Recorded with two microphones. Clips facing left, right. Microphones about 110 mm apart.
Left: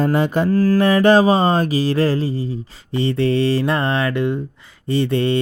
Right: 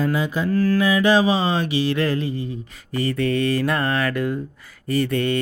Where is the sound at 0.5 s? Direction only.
35° left (ahead or behind).